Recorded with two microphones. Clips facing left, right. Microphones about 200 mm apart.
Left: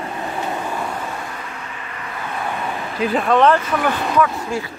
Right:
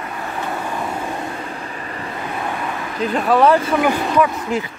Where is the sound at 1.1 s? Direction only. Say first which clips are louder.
Right 4 dB; 30° right (ahead or behind).